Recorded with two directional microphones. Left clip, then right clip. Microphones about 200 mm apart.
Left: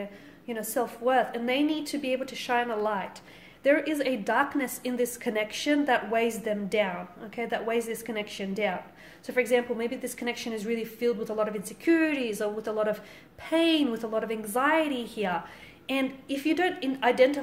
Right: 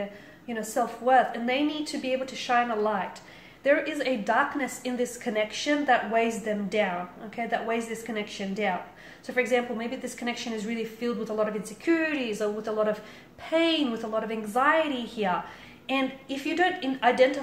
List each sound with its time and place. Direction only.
0.5 s a woman's voice: 50° left (ahead or behind)